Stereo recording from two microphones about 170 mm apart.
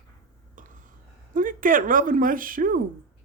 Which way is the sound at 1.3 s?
50° right (ahead or behind).